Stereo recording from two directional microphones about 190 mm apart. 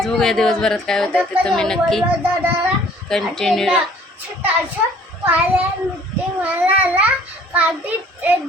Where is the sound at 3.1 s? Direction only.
Centre (ahead or behind).